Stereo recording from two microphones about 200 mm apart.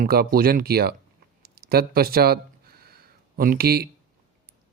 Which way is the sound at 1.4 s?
50° right (ahead or behind).